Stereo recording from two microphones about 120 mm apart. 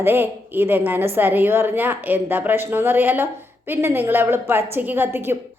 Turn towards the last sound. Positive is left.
turn(degrees=-20)  # may be behind; listen again after turning